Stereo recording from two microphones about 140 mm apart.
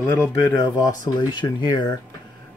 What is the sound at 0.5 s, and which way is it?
Speech, 25° left (ahead or behind).